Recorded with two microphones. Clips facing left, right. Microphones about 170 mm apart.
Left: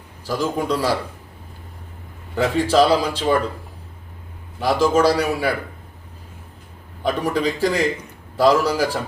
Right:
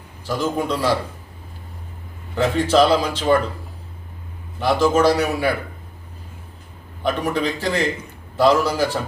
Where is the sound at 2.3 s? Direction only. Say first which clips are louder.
Even; 10° left (ahead or behind).